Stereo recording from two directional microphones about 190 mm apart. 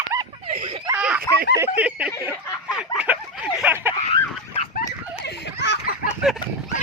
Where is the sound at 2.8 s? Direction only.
5° right (ahead or behind).